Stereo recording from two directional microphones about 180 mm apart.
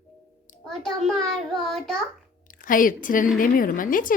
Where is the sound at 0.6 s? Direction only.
Centre (ahead or behind).